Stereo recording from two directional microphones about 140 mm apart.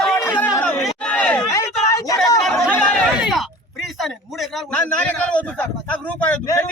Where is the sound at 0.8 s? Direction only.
10° left (ahead or behind).